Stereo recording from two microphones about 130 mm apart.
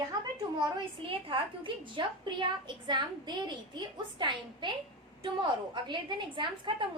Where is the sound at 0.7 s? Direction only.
40° right (ahead or behind).